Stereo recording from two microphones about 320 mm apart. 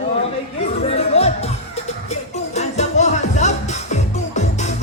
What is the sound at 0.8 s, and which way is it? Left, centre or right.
Music, centre.